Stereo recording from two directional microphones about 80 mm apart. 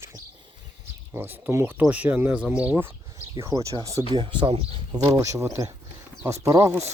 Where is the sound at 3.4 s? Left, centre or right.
Right.